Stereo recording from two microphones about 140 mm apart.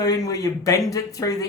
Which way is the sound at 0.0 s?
25° left (ahead or behind).